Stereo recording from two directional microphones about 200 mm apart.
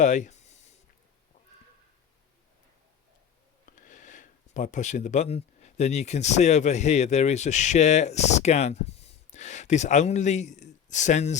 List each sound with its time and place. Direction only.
0.0 s speech: 35° left (ahead or behind)
3.8 s speech: 40° left (ahead or behind)